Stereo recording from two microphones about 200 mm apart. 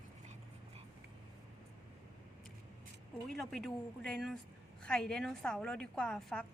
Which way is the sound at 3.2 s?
Centre (ahead or behind).